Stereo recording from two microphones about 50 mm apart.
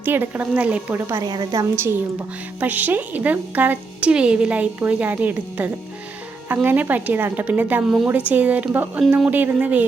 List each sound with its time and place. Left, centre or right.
0.0 s a woman's voice: right
0.5 s speech: right
0.9 s a woman's voice: right
2.6 s a woman's voice: right
4.0 s speech: centre
4.9 s a woman's voice: right
9.0 s speech: right
9.3 s a woman's voice: right